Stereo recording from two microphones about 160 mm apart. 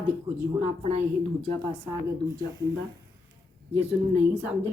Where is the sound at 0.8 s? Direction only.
40° right (ahead or behind).